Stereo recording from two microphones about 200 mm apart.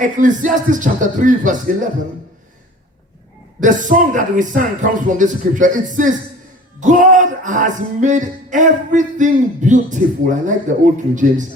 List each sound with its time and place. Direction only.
0.0 s music: 40° right (ahead or behind)
3.6 s music: 40° right (ahead or behind)